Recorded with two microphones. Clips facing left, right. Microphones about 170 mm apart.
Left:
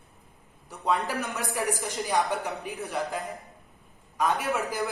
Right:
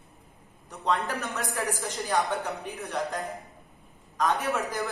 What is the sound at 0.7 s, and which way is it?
Speech, centre (ahead or behind).